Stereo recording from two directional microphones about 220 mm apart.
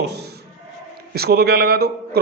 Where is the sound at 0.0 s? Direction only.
50° right (ahead or behind).